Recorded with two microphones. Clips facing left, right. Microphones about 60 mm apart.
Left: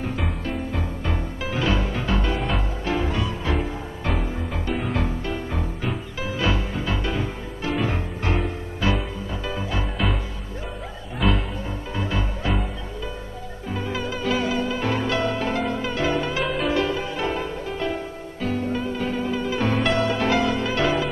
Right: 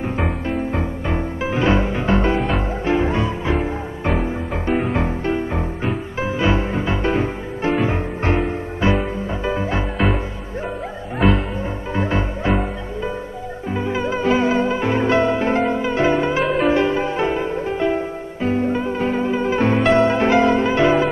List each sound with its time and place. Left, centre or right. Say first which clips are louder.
0.5 s music: right 6 dB; right
4.9 s music: right 6 dB; right
7.7 s music: right 3 dB; right
11.1 s music: right 6 dB; centre
11.9 s music: right 6 dB; right
13.7 s music: right 6 dB; right